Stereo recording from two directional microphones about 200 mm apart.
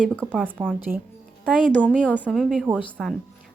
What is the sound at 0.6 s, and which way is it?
Speech, 5° right (ahead or behind).